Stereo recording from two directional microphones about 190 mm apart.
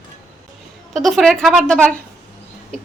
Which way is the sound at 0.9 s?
Centre (ahead or behind).